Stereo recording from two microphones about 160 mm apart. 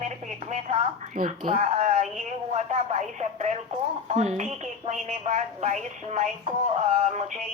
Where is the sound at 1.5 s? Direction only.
45° right (ahead or behind).